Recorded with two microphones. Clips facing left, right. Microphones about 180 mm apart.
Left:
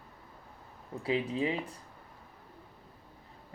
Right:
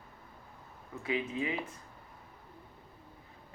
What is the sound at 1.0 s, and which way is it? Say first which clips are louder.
Speech: left 3 dB; 30° left (ahead or behind).